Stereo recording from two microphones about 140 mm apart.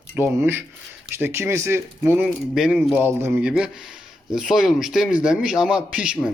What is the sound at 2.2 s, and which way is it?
Speech, centre (ahead or behind).